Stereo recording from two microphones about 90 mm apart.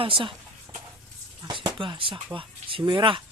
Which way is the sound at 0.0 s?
75° right (ahead or behind).